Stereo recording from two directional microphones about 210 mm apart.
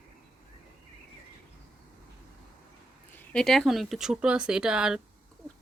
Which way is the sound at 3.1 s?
5° left (ahead or behind).